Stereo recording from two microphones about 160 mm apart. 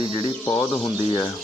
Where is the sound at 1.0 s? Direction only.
35° left (ahead or behind).